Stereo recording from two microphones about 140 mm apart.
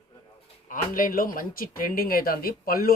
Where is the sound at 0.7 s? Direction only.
80° left.